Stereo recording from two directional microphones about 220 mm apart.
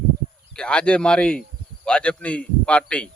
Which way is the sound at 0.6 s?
5° left (ahead or behind).